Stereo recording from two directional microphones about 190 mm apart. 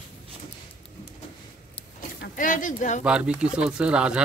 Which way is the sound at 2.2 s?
45° left (ahead or behind).